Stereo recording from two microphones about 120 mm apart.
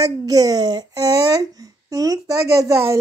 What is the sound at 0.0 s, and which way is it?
Speech, 30° right (ahead or behind).